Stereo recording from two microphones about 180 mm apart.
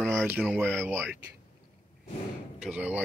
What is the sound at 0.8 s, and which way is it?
Speech, 5° right (ahead or behind).